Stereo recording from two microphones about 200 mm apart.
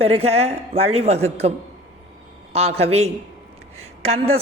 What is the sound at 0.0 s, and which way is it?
A man's voice, 30° right (ahead or behind).